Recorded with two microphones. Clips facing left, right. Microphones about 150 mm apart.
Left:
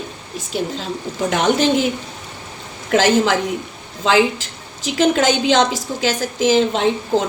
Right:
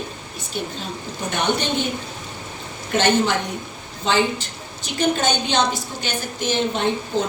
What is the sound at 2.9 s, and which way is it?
A woman's voice, 90° left.